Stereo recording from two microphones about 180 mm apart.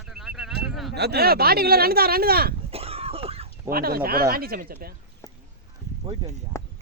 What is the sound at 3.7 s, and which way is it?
Speech, 55° right (ahead or behind).